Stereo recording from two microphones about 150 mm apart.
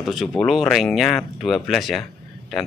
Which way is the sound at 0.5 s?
Centre (ahead or behind).